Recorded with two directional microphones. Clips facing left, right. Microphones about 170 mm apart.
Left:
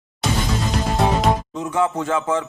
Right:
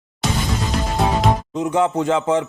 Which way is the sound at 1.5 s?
20° right (ahead or behind).